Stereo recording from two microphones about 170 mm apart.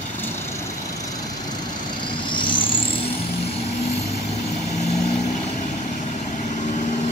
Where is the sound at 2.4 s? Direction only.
30° left (ahead or behind).